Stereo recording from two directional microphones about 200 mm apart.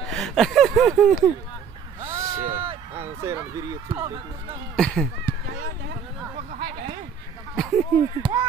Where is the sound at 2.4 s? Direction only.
30° right (ahead or behind).